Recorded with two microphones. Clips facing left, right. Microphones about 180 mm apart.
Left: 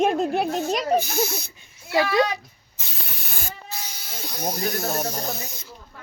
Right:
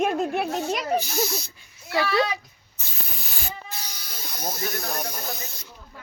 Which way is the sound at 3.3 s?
50° left (ahead or behind).